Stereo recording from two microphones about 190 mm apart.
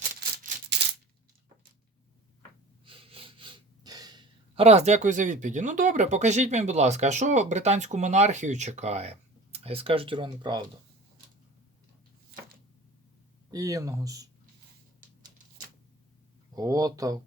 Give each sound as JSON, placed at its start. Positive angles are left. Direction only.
{"t": 2.8, "sound": "speech", "side_deg": -30}
{"t": 13.5, "sound": "speech", "side_deg": -20}
{"t": 16.6, "sound": "speech", "side_deg": -20}